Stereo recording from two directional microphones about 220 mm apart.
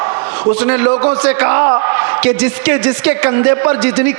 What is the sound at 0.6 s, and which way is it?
A man's voice, 15° right (ahead or behind).